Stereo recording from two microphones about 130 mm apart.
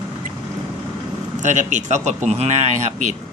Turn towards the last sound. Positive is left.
turn(degrees=-65)  # may be behind; listen again after turning